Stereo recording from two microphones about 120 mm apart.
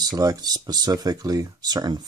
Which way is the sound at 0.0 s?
30° right (ahead or behind).